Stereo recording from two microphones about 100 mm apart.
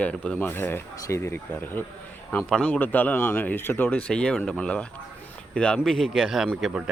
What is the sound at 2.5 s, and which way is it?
A man's voice, 10° left (ahead or behind).